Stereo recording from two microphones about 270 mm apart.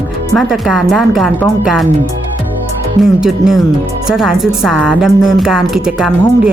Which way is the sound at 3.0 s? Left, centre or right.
Centre.